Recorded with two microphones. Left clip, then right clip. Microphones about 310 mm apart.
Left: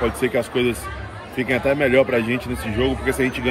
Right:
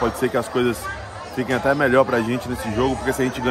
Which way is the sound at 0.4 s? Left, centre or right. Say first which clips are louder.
Left 1 dB; centre.